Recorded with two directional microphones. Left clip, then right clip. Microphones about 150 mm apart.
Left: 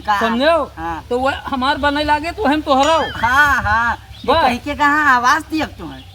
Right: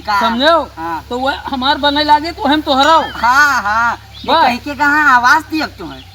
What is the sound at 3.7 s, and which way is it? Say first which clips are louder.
Speech: right 3 dB; 15° left (ahead or behind).